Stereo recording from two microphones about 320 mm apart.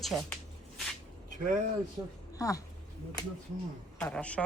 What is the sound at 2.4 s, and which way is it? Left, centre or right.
Speech, centre.